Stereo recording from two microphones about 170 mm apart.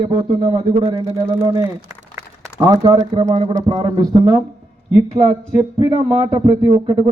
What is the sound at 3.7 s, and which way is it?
Speech, 25° right (ahead or behind).